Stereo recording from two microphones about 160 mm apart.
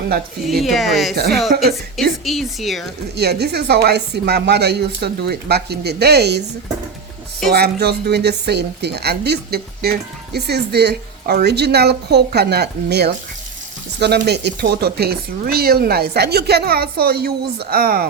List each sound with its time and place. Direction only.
0.4 s speech: centre (ahead or behind)
1.1 s speech: 80° right
2.2 s speech: centre (ahead or behind)
3.2 s a woman's voice: 90° right
7.5 s a woman's voice: 80° right